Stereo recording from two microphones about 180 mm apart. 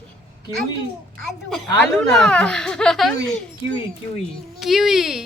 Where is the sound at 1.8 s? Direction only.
5° left (ahead or behind).